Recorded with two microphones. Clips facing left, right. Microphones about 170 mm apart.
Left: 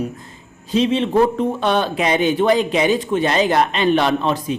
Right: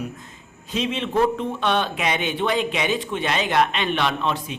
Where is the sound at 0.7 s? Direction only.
35° left (ahead or behind).